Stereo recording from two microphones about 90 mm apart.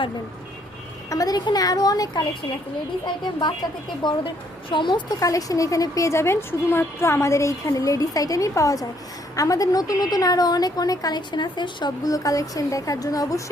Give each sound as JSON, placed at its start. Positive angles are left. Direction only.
{"t": 1.1, "sound": "a woman's voice", "side_deg": 45}
{"t": 4.0, "sound": "a woman's voice", "side_deg": 55}
{"t": 5.2, "sound": "a woman's voice", "side_deg": 40}